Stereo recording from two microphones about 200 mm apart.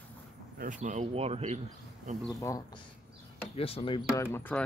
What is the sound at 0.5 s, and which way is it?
Speech, 40° right (ahead or behind).